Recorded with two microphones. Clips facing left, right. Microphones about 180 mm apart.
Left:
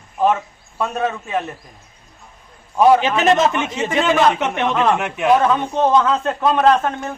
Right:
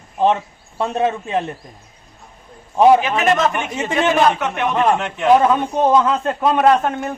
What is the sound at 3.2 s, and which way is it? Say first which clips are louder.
A man's voice: left 2 dB; 25° left (ahead or behind).